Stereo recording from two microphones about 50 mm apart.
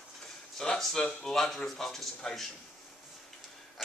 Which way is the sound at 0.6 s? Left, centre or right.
Centre.